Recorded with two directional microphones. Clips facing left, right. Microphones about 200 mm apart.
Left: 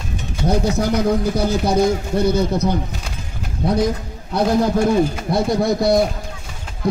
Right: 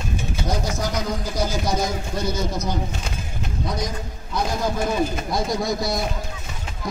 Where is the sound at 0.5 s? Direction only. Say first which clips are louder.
Left 9 dB; 60° left (ahead or behind).